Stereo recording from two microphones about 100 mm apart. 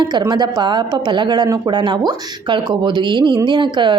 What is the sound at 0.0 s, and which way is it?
Speech, 50° right (ahead or behind).